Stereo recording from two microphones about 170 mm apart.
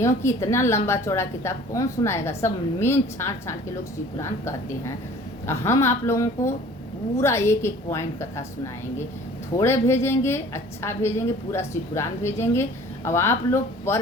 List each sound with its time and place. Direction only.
0.0 s a woman's voice: 15° left (ahead or behind)
5.5 s a woman's voice: 15° left (ahead or behind)